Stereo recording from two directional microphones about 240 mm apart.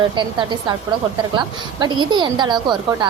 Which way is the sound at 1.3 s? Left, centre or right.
Centre.